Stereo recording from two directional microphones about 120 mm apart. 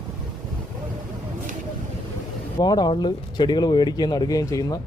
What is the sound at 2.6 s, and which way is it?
Speech, 35° left (ahead or behind).